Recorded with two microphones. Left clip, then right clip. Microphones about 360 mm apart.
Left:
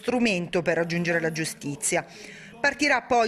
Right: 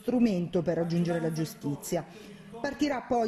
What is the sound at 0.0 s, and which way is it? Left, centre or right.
Speech, left.